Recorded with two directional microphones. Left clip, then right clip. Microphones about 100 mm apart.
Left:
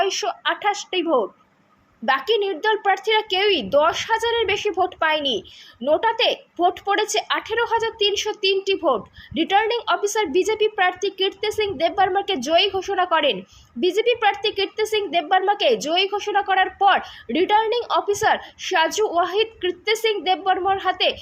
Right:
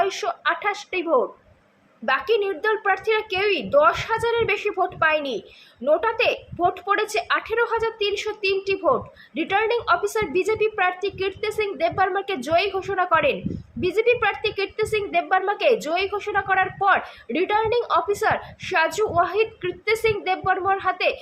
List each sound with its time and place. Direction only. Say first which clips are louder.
0.0 s a woman's voice: left 1 dB; 25° left (ahead or behind)